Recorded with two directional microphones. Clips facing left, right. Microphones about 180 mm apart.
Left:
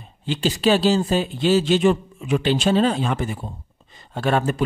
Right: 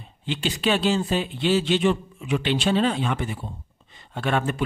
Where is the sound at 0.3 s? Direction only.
40° left (ahead or behind).